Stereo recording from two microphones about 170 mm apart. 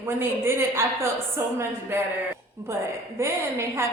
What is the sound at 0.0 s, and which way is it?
Speech, 15° right (ahead or behind).